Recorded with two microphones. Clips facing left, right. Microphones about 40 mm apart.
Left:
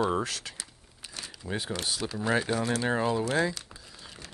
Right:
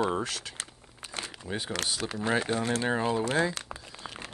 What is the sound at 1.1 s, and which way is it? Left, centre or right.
Crumpling, right.